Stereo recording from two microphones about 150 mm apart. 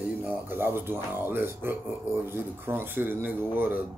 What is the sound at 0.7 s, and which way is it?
Speech, 15° right (ahead or behind).